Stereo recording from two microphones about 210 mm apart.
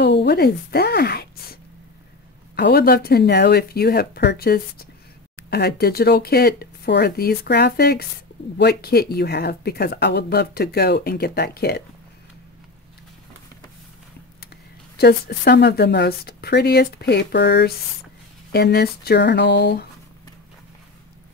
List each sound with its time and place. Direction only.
0.0 s a sound: 55° left (ahead or behind)
2.5 s speech: 50° left (ahead or behind)
15.0 s speech: 50° left (ahead or behind)